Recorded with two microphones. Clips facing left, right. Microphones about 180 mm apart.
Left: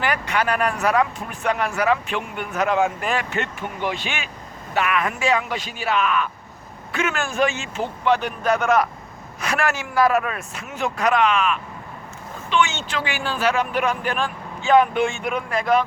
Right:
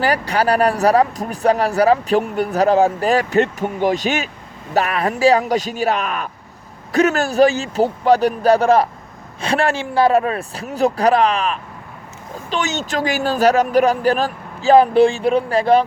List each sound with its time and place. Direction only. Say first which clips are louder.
0.0 s speech: right 5 dB; 35° right (ahead or behind)